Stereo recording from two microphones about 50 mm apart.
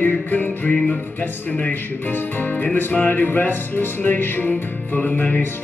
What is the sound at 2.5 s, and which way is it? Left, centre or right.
Music, left.